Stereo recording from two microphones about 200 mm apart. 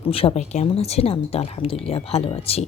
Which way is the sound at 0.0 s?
30° left (ahead or behind).